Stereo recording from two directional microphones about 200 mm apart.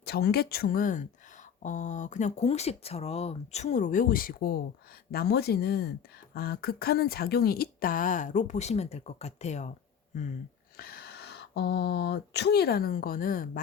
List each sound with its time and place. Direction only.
0.0 s speech: 50° left (ahead or behind); by 9.7 s 35° left (ahead or behind)
10.8 s speech: 50° left (ahead or behind)